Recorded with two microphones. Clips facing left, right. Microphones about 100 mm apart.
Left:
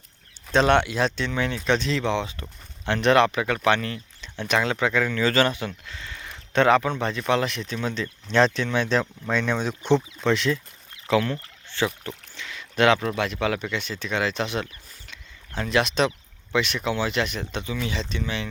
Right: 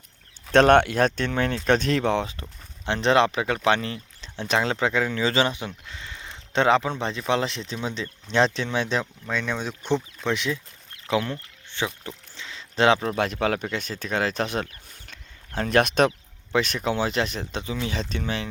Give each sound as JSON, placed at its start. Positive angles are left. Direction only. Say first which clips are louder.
{"t": 0.5, "sound": "speech", "louder": "right 3 dB", "side_deg": -55}
{"t": 2.4, "sound": "speech", "louder": "left 1 dB", "side_deg": -25}
{"t": 9.3, "sound": "speech", "louder": "left 3 dB", "side_deg": 0}
{"t": 10.2, "sound": "speech", "louder": "left 3 dB", "side_deg": -15}
{"t": 12.0, "sound": "a sound", "louder": "left 2 dB", "side_deg": -25}
{"t": 13.1, "sound": "speech", "louder": "right 1 dB", "side_deg": -40}
{"t": 16.5, "sound": "speech", "louder": "right 1 dB", "side_deg": -40}